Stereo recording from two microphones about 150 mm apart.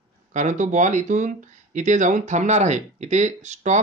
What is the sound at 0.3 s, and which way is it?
Speech, 55° right (ahead or behind).